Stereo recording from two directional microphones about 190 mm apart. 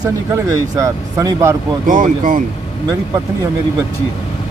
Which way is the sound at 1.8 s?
45° right (ahead or behind).